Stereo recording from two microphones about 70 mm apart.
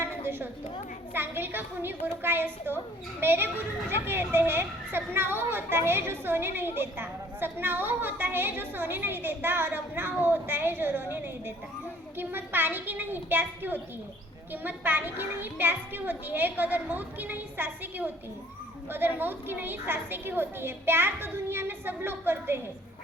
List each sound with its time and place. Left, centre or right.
1.1 s a woman's voice: right